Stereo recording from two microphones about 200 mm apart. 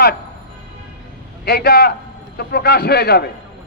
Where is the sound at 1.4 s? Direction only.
50° left (ahead or behind).